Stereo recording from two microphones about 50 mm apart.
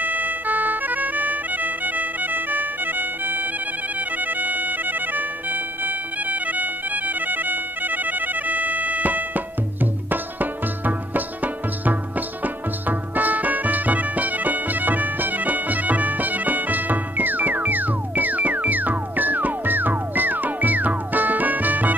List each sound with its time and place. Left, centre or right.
0.0 s music: right